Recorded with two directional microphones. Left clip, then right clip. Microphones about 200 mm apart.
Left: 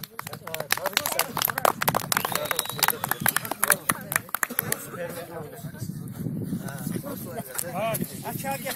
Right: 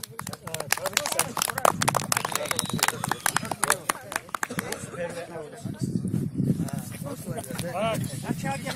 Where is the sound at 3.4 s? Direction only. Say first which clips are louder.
Even; 45° left (ahead or behind).